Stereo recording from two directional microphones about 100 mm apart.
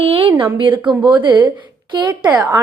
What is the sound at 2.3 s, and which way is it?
Speech, 30° right (ahead or behind).